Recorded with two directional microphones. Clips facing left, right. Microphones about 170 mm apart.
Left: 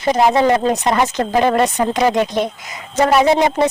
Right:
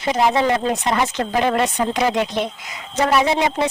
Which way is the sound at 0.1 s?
45° left (ahead or behind).